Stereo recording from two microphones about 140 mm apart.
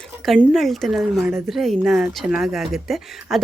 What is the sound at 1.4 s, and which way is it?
Speech, centre (ahead or behind).